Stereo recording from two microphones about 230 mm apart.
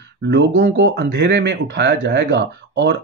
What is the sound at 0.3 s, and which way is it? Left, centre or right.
Speech, right.